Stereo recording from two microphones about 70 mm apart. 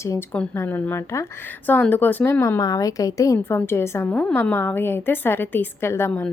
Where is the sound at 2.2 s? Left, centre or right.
Left.